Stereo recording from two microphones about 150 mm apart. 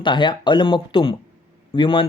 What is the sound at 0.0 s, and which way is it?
Speech, 30° left (ahead or behind).